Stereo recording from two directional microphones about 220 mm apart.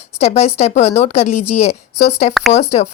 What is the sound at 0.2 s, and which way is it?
Speech, 30° left (ahead or behind).